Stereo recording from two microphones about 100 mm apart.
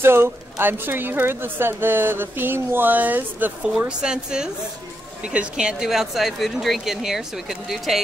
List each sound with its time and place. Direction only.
0.0 s a woman's voice: 25° right (ahead or behind); by 8.0 s centre (ahead or behind)